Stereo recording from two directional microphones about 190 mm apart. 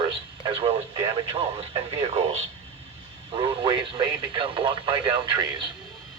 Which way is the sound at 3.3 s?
25° right (ahead or behind).